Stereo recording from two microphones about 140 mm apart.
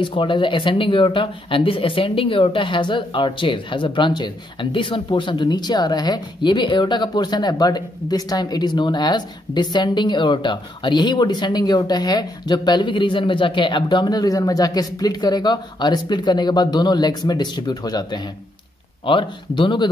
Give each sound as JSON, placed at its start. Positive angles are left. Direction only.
{"t": 0.0, "sound": "speech", "side_deg": 35}